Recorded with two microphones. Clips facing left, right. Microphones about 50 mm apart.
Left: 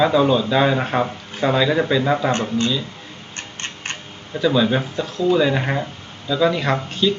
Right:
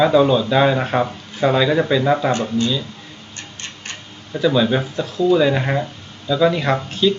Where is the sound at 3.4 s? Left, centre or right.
Left.